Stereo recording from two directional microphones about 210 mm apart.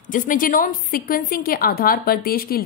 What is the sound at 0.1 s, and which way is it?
A woman's voice, 40° left (ahead or behind).